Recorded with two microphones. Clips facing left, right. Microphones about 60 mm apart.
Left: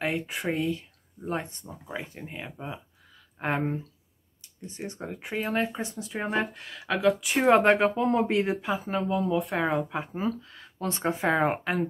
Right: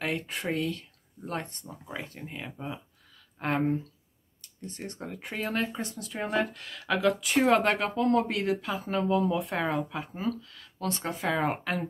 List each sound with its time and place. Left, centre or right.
0.0 s speech: centre
7.3 s speech: left
8.8 s speech: centre
9.7 s speech: centre